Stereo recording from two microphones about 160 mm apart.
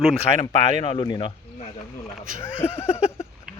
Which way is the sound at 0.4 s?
30° left (ahead or behind).